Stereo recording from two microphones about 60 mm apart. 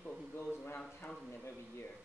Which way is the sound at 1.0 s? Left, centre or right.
Left.